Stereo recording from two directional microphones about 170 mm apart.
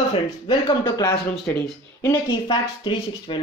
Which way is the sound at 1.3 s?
5° left (ahead or behind).